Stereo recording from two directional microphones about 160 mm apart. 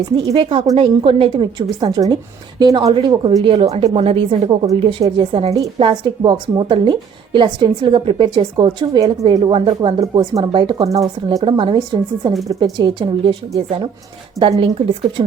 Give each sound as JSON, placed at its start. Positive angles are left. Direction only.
{"t": 0.3, "sound": "a woman's voice", "side_deg": -35}
{"t": 10.0, "sound": "a woman's voice", "side_deg": -20}
{"t": 14.3, "sound": "speech", "side_deg": -30}